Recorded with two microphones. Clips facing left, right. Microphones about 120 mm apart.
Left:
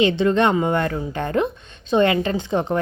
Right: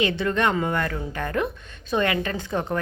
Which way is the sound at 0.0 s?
25° left (ahead or behind).